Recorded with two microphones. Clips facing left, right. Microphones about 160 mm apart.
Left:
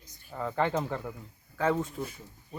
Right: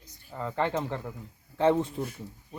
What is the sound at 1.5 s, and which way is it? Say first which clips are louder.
Speech: right 4 dB; 30° right (ahead or behind).